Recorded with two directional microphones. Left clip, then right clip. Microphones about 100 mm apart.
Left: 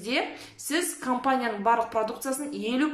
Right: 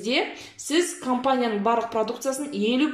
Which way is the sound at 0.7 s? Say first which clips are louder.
Right 4 dB; 35° right (ahead or behind).